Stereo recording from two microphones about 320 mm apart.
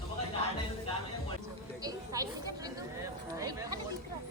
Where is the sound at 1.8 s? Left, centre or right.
Centre.